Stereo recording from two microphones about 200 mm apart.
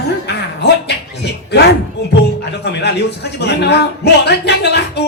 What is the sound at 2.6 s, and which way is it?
Speech, 55° left (ahead or behind).